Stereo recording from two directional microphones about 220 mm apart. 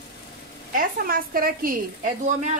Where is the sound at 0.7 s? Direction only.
40° right (ahead or behind).